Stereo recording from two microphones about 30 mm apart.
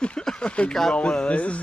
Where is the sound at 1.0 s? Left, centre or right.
Left.